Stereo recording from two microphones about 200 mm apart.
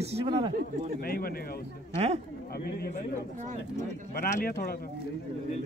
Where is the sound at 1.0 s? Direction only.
50° left (ahead or behind).